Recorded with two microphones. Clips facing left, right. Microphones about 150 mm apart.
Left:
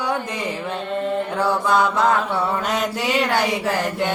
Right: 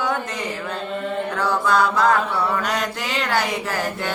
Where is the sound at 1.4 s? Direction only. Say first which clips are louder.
Even; 20° left (ahead or behind).